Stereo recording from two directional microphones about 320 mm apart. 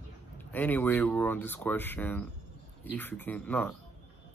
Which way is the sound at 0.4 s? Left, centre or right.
Centre.